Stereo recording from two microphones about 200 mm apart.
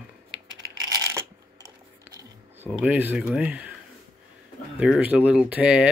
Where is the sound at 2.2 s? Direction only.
10° right (ahead or behind).